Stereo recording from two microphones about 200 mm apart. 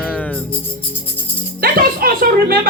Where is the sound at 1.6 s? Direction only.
50° right (ahead or behind).